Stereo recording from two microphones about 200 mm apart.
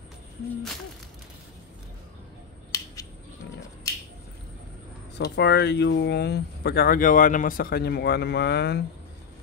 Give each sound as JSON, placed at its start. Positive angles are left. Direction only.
{"t": 5.1, "sound": "speech", "side_deg": 60}